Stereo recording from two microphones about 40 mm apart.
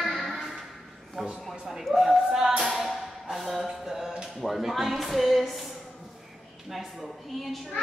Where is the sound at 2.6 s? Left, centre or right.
Centre.